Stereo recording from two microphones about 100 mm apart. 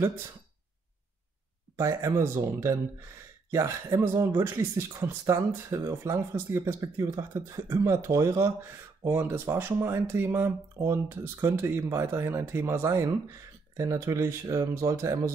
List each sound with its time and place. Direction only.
1.8 s speech: 30° right (ahead or behind)
9.0 s speech: 20° right (ahead or behind)